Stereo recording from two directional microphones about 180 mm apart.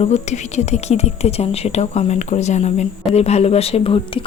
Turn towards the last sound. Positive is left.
turn(degrees=30)  # may be behind; listen again after turning